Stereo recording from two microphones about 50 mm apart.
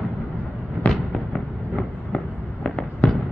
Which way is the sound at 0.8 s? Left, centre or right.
Left.